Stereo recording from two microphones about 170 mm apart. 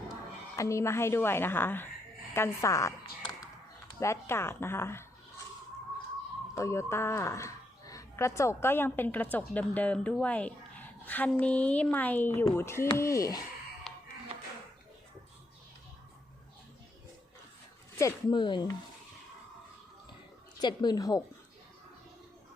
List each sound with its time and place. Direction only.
0.5 s a woman's voice: 20° left (ahead or behind)
6.5 s a woman's voice: 15° left (ahead or behind)
13.9 s music: centre (ahead or behind)
17.9 s speech: 20° left (ahead or behind)
20.6 s speech: 25° left (ahead or behind)